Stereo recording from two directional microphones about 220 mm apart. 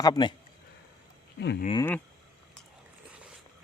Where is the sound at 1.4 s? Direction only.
50° left (ahead or behind).